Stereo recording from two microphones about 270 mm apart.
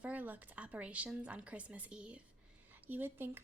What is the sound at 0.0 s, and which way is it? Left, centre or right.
Speech, centre.